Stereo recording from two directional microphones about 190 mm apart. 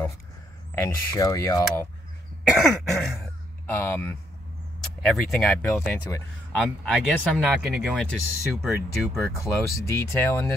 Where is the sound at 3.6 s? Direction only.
10° left (ahead or behind).